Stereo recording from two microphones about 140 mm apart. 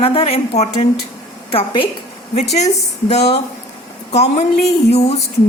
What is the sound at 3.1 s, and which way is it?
Speech, 50° left (ahead or behind).